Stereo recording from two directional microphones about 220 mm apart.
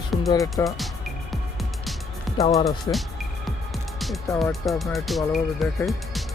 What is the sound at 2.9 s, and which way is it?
Speech, 20° left (ahead or behind).